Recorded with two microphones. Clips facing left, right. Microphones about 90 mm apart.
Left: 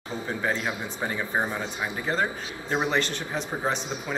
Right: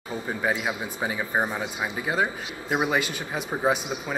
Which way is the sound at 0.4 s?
10° right (ahead or behind).